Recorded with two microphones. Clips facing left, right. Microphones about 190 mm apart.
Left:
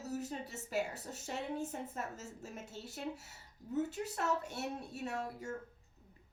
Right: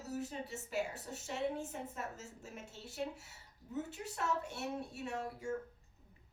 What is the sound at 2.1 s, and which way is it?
A woman's voice, 40° left (ahead or behind).